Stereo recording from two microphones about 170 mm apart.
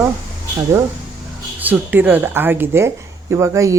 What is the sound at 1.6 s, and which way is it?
Speech, 10° right (ahead or behind).